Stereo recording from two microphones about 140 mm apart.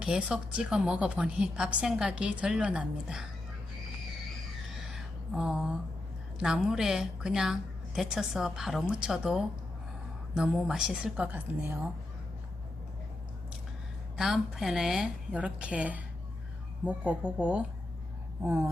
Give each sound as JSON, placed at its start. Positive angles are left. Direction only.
{"t": 0.0, "sound": "a woman's voice", "side_deg": -5}
{"t": 4.9, "sound": "a sound", "side_deg": -5}
{"t": 6.4, "sound": "a woman's voice", "side_deg": -5}
{"t": 14.2, "sound": "a woman's voice", "side_deg": 0}